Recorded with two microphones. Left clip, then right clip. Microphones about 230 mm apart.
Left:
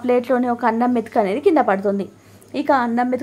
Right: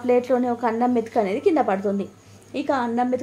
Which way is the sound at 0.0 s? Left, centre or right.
Centre.